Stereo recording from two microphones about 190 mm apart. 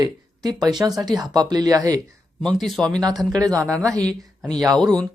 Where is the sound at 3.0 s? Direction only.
20° right (ahead or behind).